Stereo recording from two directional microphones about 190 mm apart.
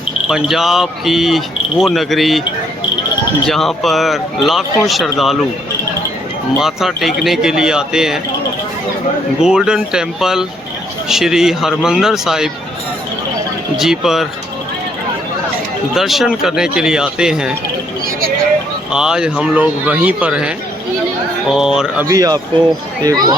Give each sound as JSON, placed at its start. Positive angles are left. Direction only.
{"t": 0.3, "sound": "speech", "side_deg": 0}
{"t": 3.4, "sound": "speech", "side_deg": 0}
{"t": 6.6, "sound": "speech", "side_deg": 0}
{"t": 9.4, "sound": "speech", "side_deg": -5}
{"t": 13.7, "sound": "speech", "side_deg": 0}
{"t": 16.0, "sound": "speech", "side_deg": 0}
{"t": 18.9, "sound": "speech", "side_deg": -5}
{"t": 21.5, "sound": "speech", "side_deg": -5}
{"t": 22.0, "sound": "speech", "side_deg": -20}